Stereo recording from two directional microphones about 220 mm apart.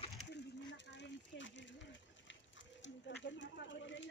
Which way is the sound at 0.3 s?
55° left (ahead or behind).